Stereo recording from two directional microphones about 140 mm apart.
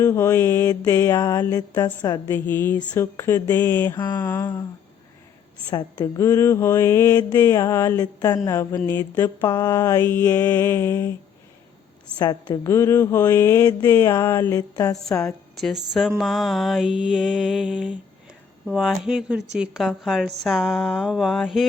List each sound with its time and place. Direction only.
0.0 s mantra: 20° left (ahead or behind)
2.3 s mantra: 15° left (ahead or behind)
5.7 s mantra: 25° left (ahead or behind)
12.2 s a woman's voice: 30° left (ahead or behind)
12.6 s mantra: 20° left (ahead or behind)
15.2 s speech: 5° left (ahead or behind)